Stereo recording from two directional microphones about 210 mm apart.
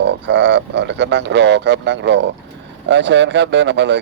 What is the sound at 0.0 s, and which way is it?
Speech, 55° right (ahead or behind).